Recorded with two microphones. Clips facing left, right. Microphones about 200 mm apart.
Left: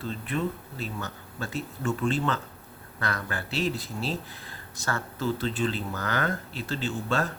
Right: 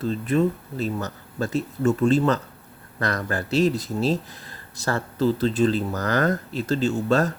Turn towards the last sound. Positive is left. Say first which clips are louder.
# right 8 dB
turn(degrees=-40)  # may be behind; listen again after turning